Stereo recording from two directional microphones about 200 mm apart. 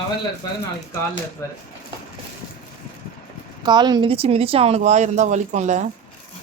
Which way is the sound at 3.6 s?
20° right (ahead or behind).